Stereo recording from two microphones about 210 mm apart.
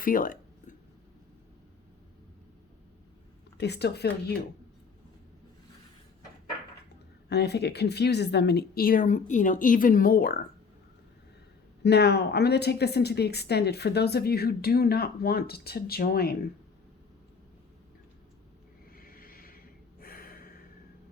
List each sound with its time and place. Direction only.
0.0 s a sound: 40° left (ahead or behind)
3.6 s a woman's voice: 50° left (ahead or behind)
7.3 s a woman's voice: 50° left (ahead or behind)
11.8 s a woman's voice: 50° left (ahead or behind)
18.9 s snort: 45° left (ahead or behind)